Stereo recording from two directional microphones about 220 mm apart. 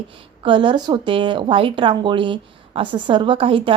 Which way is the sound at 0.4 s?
20° right (ahead or behind).